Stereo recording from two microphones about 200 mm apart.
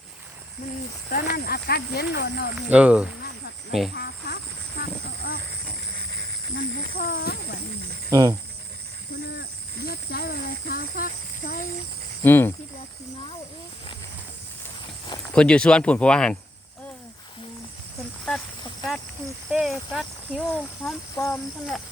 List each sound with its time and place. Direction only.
1.1 s speech: 50° left (ahead or behind)
2.6 s speech: 5° right (ahead or behind)
3.9 s a sound: 50° left (ahead or behind)
6.5 s speech: 50° left (ahead or behind)
8.1 s speech: 15° right (ahead or behind)
9.8 s speech: 50° left (ahead or behind)
12.2 s speech: 10° left (ahead or behind)
15.3 s speech: 5° left (ahead or behind)
19.5 s speech: 5° right (ahead or behind)
20.8 s speech: 10° left (ahead or behind)